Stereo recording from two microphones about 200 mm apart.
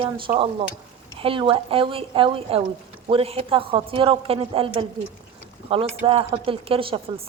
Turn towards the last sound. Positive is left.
turn(degrees=-25)  # may be behind; listen again after turning